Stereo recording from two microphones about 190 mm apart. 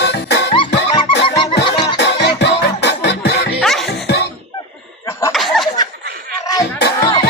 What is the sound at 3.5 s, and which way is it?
Music, centre (ahead or behind).